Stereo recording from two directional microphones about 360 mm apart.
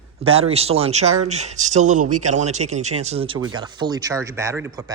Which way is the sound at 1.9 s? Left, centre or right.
Right.